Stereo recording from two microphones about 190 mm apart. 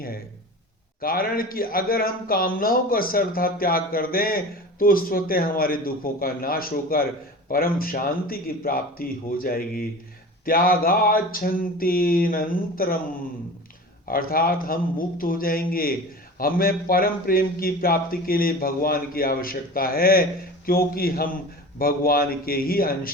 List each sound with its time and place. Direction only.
1.0 s speech: 50° left (ahead or behind)
14.1 s speech: 50° left (ahead or behind)